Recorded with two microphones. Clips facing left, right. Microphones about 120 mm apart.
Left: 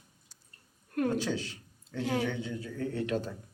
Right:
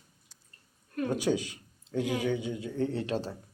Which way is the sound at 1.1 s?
15° right (ahead or behind).